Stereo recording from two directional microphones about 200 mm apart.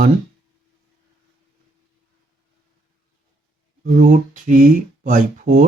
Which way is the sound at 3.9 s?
40° right (ahead or behind).